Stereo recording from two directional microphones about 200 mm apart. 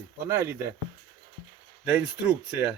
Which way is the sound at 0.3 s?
10° right (ahead or behind).